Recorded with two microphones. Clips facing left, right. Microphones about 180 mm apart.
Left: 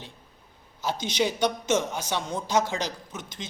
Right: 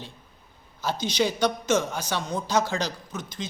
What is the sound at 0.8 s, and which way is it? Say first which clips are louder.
A man's voice: right 1 dB; 20° left (ahead or behind).